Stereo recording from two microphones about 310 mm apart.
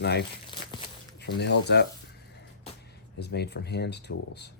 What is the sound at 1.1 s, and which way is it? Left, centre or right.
Speech, left.